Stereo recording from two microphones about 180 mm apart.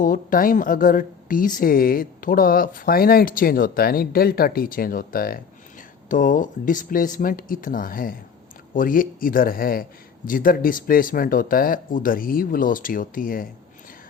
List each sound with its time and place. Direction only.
0.0 s a woman's voice: 50° left (ahead or behind)